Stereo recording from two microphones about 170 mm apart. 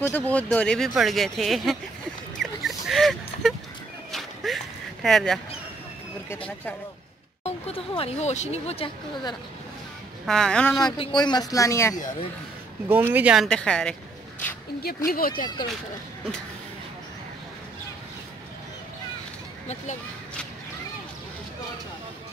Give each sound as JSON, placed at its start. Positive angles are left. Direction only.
{"t": 0.0, "sound": "speech", "side_deg": 10}
{"t": 2.3, "sound": "a sound", "side_deg": 0}
{"t": 5.0, "sound": "speech", "side_deg": 0}
{"t": 7.4, "sound": "speech", "side_deg": 35}
{"t": 10.2, "sound": "speech", "side_deg": 5}
{"t": 11.0, "sound": "speech", "side_deg": 25}
{"t": 12.8, "sound": "speech", "side_deg": -10}
{"t": 15.0, "sound": "speech", "side_deg": 60}